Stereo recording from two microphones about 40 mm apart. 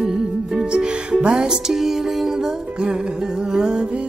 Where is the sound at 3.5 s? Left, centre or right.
Right.